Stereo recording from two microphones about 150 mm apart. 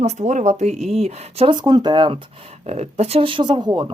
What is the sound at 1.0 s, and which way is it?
Speech, 40° right (ahead or behind).